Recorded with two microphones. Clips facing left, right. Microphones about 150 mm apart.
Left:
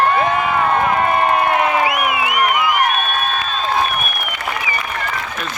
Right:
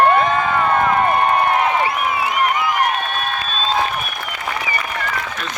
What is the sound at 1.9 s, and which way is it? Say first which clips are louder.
Crowd: left 1 dB; 90° left.